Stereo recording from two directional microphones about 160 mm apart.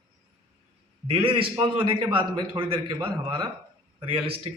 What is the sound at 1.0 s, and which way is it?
A man's voice, 35° right (ahead or behind).